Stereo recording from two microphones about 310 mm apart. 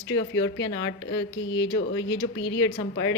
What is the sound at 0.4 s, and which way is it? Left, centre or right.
A woman's voice, left.